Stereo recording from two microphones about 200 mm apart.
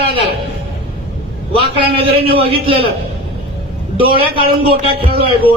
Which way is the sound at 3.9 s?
25° right (ahead or behind).